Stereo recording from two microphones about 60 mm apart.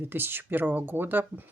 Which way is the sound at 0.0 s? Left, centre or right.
Right.